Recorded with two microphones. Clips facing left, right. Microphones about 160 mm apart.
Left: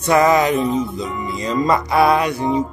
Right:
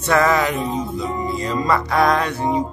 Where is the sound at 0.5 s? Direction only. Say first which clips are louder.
Left 4 dB; 25° right (ahead or behind).